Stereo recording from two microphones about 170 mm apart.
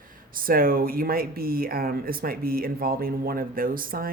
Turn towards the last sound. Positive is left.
turn(degrees=-55)  # may be behind; listen again after turning